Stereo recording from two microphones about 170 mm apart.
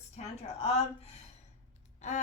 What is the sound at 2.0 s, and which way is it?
Speech, 45° left (ahead or behind).